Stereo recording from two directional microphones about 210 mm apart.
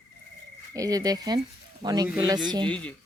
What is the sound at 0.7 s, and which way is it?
Speech, 15° right (ahead or behind).